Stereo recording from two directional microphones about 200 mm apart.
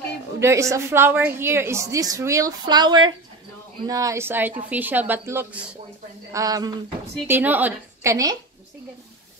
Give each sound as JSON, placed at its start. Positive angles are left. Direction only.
{"t": 0.4, "sound": "a woman's voice", "side_deg": -15}
{"t": 6.3, "sound": "a woman's voice", "side_deg": -20}